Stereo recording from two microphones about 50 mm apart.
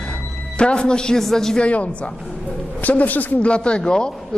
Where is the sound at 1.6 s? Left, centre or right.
Left.